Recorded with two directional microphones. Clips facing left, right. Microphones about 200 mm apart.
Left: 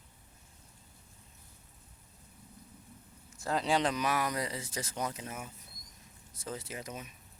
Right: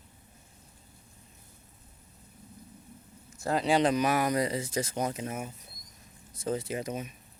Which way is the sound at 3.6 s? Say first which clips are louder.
Right 6 dB; 10° right (ahead or behind).